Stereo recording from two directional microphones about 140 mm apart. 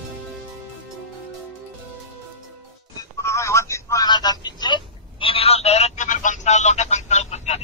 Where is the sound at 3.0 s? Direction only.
20° left (ahead or behind).